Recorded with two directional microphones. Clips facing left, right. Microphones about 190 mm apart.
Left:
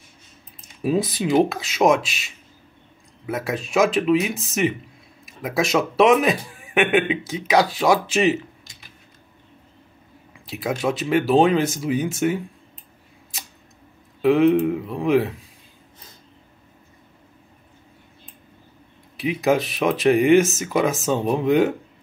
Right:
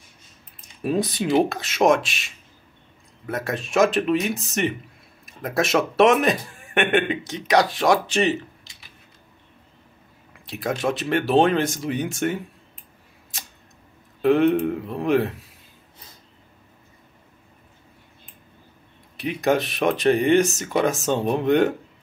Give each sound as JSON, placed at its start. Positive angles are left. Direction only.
{"t": 0.8, "sound": "a man's voice", "side_deg": 5}
{"t": 10.4, "sound": "a man's voice", "side_deg": 5}
{"t": 14.2, "sound": "a man's voice", "side_deg": 0}
{"t": 19.1, "sound": "a man's voice", "side_deg": 0}